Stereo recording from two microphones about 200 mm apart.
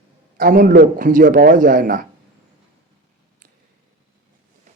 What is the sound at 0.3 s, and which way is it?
A man's voice, 45° right (ahead or behind).